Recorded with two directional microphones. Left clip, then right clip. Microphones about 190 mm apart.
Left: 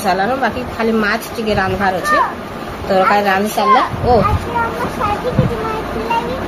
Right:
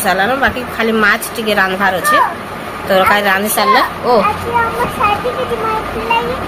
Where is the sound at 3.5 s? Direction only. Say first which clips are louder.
Even; 45° right (ahead or behind).